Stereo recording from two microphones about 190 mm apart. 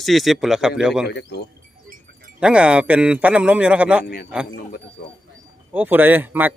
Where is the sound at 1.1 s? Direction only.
60° left (ahead or behind).